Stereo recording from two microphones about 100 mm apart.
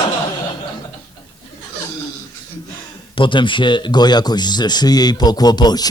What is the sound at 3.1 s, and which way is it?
Speech, 55° left (ahead or behind).